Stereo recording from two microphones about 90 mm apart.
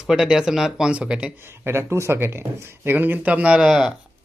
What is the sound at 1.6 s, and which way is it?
Speech, 30° right (ahead or behind).